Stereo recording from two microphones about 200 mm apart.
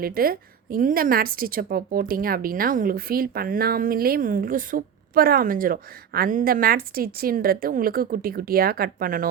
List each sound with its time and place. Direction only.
0.0 s a woman's voice: 45° right (ahead or behind)